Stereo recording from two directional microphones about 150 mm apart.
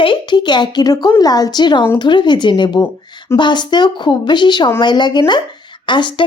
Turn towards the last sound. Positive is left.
turn(degrees=30)  # may be behind; listen again after turning